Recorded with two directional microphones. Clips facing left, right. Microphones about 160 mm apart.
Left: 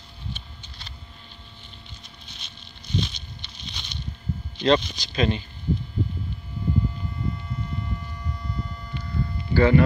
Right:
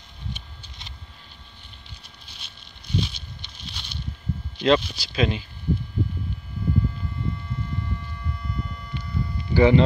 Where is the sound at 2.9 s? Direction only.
5° right (ahead or behind).